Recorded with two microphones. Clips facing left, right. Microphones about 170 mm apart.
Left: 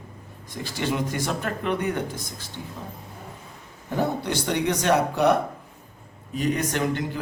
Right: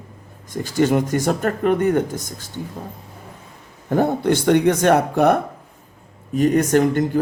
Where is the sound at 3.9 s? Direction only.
55° right (ahead or behind).